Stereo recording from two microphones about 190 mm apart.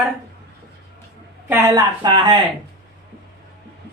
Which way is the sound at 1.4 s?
15° right (ahead or behind).